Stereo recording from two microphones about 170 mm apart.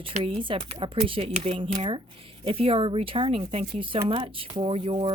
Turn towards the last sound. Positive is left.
turn(degrees=-35)  # may be behind; listen again after turning